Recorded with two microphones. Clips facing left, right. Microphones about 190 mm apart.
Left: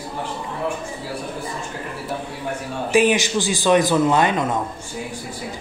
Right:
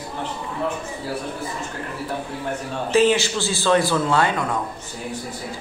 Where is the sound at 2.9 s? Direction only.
15° left (ahead or behind).